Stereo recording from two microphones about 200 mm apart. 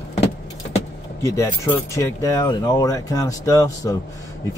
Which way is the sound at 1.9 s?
15° left (ahead or behind).